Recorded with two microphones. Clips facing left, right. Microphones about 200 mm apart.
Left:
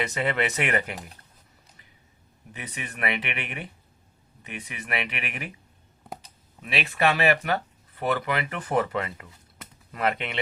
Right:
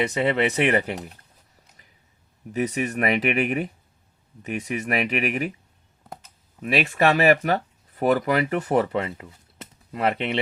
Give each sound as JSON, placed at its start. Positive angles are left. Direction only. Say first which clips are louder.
{"t": 0.0, "sound": "speech", "louder": "right 5 dB", "side_deg": -30}
{"t": 2.5, "sound": "speech", "louder": "right 14 dB", "side_deg": -45}
{"t": 6.6, "sound": "speech", "louder": "right 5 dB", "side_deg": -45}